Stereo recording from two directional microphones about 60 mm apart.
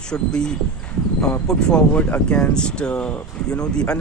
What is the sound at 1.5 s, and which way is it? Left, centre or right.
Speech, centre.